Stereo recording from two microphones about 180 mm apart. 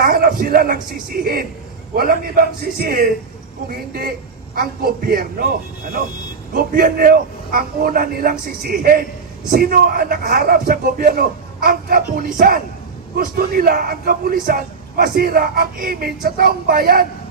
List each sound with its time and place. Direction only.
0.0 s a woman's voice: 55° right (ahead or behind)
6.6 s a man's voice: 55° right (ahead or behind)